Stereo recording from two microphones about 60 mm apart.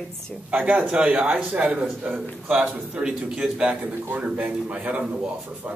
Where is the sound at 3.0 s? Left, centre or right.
Centre.